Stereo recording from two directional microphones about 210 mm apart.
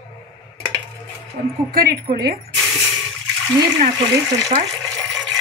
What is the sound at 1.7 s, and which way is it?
Speech, 45° right (ahead or behind).